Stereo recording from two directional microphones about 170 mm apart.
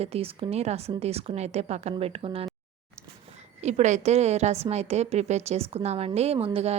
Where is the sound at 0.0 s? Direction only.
35° right (ahead or behind).